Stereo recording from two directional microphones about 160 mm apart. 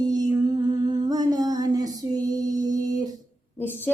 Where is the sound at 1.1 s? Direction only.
25° right (ahead or behind).